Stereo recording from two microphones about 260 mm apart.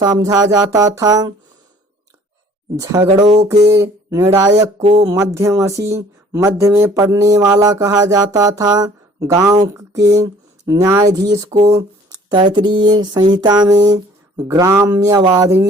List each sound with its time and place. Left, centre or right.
0.0 s speech: centre
2.9 s speech: centre
3.5 s speech: centre
4.8 s speech: right
5.0 s speech: centre